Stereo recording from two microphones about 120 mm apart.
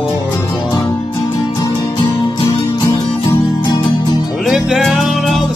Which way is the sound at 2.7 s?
35° left (ahead or behind).